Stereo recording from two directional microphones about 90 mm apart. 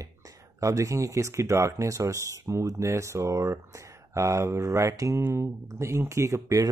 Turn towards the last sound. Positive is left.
turn(degrees=-35)  # may be behind; listen again after turning